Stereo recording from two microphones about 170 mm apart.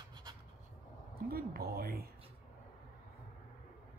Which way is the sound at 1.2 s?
60° right (ahead or behind).